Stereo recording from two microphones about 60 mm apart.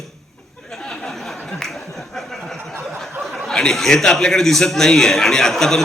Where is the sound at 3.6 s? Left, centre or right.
Centre.